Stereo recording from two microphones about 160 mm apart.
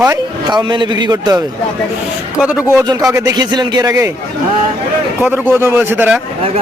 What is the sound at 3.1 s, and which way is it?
A man's voice, 25° right (ahead or behind).